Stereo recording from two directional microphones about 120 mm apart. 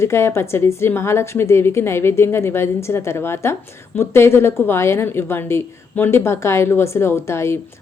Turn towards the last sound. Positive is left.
turn(degrees=20)  # may be behind; listen again after turning